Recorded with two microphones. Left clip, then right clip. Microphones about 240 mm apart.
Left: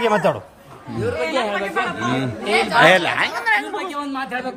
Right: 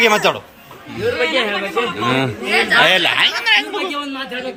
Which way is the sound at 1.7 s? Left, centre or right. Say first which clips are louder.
Right 4 dB; centre.